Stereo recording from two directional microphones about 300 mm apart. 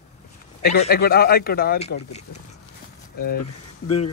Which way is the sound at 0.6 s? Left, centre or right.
Left.